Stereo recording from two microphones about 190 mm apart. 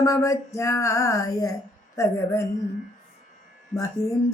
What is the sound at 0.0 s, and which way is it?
Speech, 15° left (ahead or behind).